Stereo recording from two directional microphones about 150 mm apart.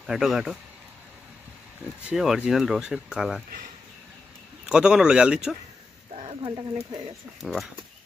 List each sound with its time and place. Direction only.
0.0 s speech: centre (ahead or behind)
1.9 s speech: 5° right (ahead or behind)
4.6 s speech: 5° right (ahead or behind)
6.1 s a sound: 45° right (ahead or behind)
7.4 s speech: centre (ahead or behind)